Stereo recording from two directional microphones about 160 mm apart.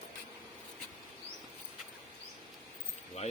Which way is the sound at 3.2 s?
45° left (ahead or behind).